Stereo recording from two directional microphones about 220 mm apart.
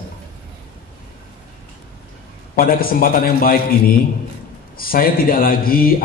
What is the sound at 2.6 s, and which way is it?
Speech, 40° left (ahead or behind).